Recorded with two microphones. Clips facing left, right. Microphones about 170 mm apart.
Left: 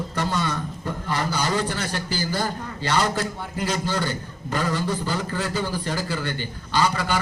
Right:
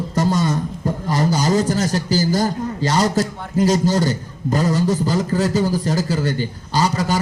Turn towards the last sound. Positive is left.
turn(degrees=-40)  # may be behind; listen again after turning